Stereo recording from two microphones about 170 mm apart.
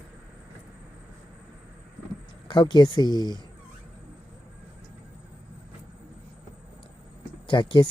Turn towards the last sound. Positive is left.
turn(degrees=30)  # may be behind; listen again after turning